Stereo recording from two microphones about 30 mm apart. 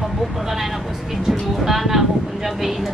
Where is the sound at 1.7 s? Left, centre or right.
Centre.